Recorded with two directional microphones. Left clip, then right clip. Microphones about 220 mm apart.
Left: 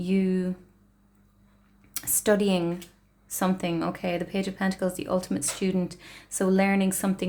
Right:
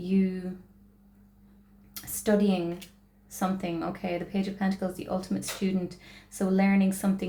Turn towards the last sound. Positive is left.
turn(degrees=40)  # may be behind; listen again after turning